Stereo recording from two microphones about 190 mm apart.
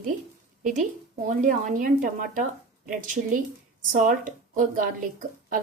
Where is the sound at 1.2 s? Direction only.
40° right (ahead or behind).